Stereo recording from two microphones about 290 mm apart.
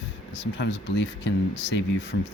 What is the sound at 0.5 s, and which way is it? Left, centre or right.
Speech, left.